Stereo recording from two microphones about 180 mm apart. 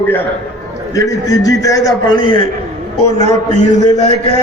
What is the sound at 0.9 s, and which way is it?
A man's voice, 20° left (ahead or behind).